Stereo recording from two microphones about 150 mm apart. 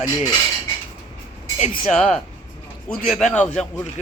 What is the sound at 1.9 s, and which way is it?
Speech, 50° left (ahead or behind).